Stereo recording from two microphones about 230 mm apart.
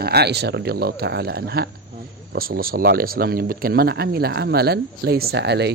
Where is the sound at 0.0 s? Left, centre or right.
Right.